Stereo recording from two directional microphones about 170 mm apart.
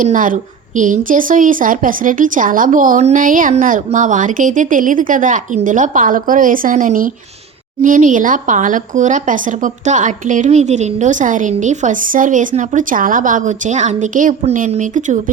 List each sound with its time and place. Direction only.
0.0 s speech: 50° right (ahead or behind)